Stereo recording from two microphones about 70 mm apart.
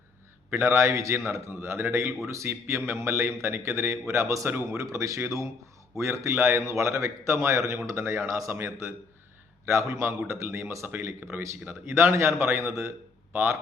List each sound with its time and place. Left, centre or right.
0.5 s a man's voice: right
4.4 s speech: right
4.8 s a man's voice: right